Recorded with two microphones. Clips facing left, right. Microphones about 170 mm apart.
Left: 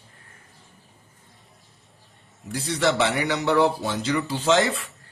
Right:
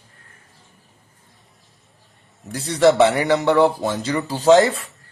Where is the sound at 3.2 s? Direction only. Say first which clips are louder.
Right 5 dB; 55° right (ahead or behind).